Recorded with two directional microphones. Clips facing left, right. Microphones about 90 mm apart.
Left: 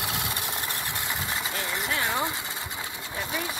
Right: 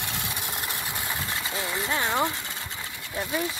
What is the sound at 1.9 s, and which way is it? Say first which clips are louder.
Speech: right 3 dB; 20° right (ahead or behind).